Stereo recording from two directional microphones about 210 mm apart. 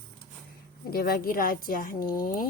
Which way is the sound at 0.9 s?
45° left (ahead or behind).